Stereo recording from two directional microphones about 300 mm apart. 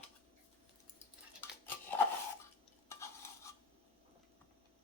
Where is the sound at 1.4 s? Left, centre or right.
Centre.